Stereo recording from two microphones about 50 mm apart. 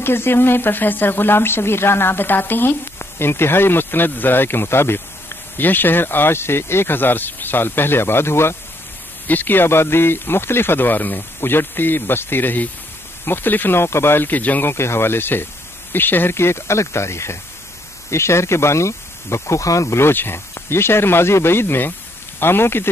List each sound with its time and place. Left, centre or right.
0.0 s speech: left
9.3 s speech: left
13.8 s speech: left
14.7 s speech: left
16.3 s speech: left